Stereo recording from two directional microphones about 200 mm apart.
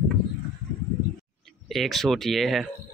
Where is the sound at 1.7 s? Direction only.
Centre (ahead or behind).